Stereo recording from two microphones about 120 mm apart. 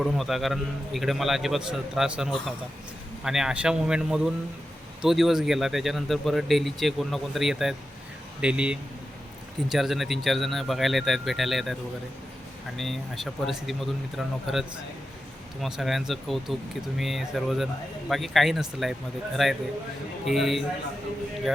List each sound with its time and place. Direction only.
0.0 s speech: centre (ahead or behind)
15.6 s speech: centre (ahead or behind)